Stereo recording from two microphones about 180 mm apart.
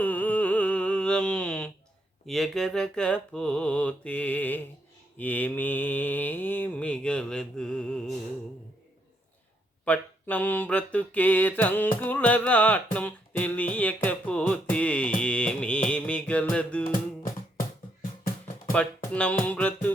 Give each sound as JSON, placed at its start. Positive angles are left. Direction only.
{"t": 0.0, "sound": "a sound", "side_deg": 10}
{"t": 2.2, "sound": "mantra", "side_deg": 0}
{"t": 5.1, "sound": "music", "side_deg": 10}
{"t": 9.8, "sound": "music", "side_deg": 10}
{"t": 18.7, "sound": "speech", "side_deg": 5}
{"t": 19.5, "sound": "music", "side_deg": 10}